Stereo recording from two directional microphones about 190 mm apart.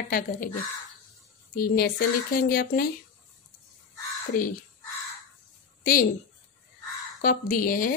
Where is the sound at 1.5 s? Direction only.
50° left (ahead or behind).